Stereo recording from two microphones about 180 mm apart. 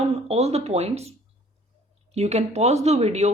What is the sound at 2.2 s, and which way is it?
A woman's voice, 40° right (ahead or behind).